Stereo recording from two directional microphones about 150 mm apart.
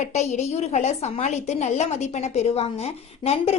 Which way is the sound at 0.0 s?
50° left (ahead or behind).